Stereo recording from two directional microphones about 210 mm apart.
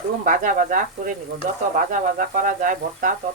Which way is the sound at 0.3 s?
40° right (ahead or behind).